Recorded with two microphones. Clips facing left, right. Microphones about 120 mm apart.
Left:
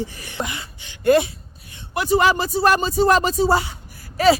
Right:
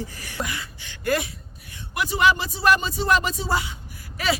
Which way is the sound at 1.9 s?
35° left (ahead or behind).